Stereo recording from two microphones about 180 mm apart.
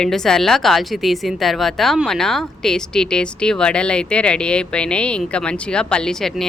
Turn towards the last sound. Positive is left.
turn(degrees=0)  # may be behind; listen again after turning